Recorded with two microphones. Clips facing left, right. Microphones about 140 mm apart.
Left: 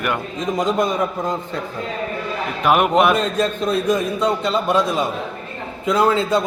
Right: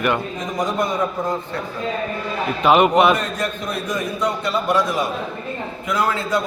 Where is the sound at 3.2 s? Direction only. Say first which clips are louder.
Left 5 dB; 25° left (ahead or behind).